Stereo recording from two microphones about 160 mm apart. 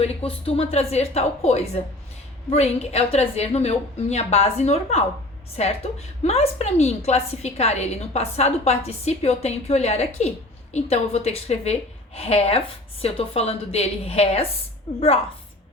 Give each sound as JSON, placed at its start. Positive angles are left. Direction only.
{"t": 0.0, "sound": "a woman's voice", "side_deg": 40}